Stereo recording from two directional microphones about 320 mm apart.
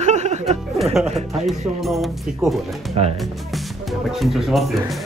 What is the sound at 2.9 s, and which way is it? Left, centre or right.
Speech, centre.